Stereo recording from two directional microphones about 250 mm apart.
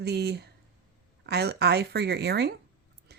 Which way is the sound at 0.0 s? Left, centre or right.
Right.